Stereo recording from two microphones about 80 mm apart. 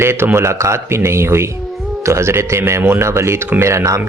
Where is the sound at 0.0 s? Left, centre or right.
Right.